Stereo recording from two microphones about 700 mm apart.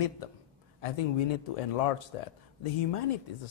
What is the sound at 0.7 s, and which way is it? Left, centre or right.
Speech, left.